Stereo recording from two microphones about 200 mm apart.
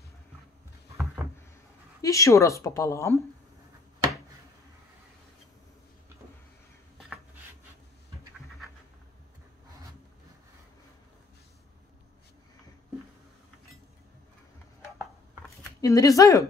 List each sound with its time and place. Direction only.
2.0 s a woman's voice: 15° left (ahead or behind)
15.8 s a woman's voice: 15° left (ahead or behind)